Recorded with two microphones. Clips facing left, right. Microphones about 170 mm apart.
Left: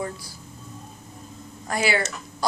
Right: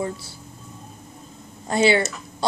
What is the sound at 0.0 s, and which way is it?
Speech, 25° right (ahead or behind).